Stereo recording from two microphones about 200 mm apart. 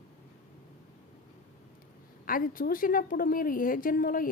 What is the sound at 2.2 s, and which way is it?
A woman's voice, 45° left (ahead or behind).